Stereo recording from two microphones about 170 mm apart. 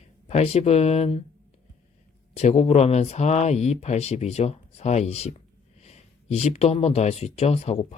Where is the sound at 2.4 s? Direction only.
40° left (ahead or behind).